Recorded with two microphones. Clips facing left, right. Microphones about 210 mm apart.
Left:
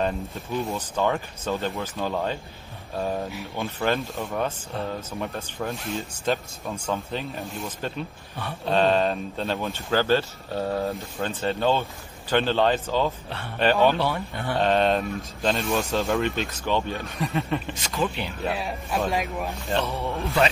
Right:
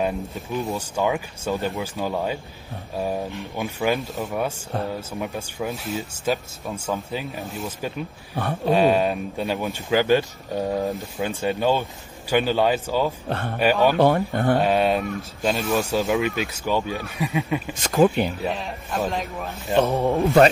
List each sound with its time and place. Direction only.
0.0 s speech: centre (ahead or behind)
13.3 s speech: 50° right (ahead or behind)
13.6 s speech: 10° right (ahead or behind)
13.9 s speech: 50° right (ahead or behind)
14.6 s speech: 10° right (ahead or behind)
17.8 s speech: 50° right (ahead or behind)
18.5 s speech: 10° left (ahead or behind)
19.8 s speech: 45° right (ahead or behind)